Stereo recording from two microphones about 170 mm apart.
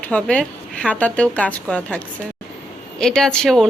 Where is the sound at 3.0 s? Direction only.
5° left (ahead or behind).